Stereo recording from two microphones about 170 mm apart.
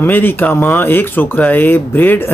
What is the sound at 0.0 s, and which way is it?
Speech, 10° left (ahead or behind).